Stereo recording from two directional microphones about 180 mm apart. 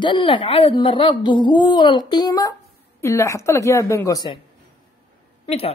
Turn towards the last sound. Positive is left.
turn(degrees=35)  # may be behind; listen again after turning